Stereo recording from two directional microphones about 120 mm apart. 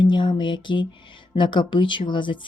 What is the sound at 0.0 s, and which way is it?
Speech, 40° left (ahead or behind).